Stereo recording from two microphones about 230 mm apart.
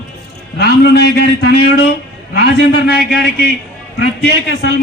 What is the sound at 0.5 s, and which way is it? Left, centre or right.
A man's voice, left.